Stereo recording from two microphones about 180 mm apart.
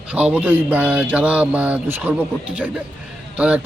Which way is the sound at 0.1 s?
10° right (ahead or behind).